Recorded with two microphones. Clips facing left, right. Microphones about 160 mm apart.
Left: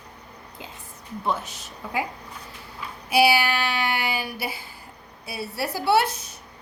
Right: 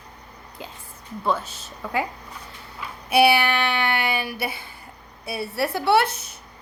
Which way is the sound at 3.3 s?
60° right (ahead or behind).